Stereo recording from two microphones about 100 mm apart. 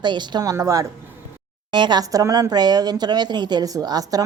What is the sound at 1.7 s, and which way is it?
Speech, 50° right (ahead or behind).